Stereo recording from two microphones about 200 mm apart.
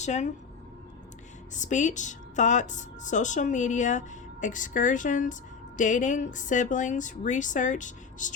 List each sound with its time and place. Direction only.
0.0 s a woman's voice: 35° left (ahead or behind)
1.5 s a woman's voice: 40° left (ahead or behind)